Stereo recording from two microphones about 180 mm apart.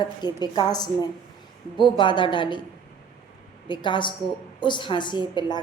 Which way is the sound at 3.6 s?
25° left (ahead or behind).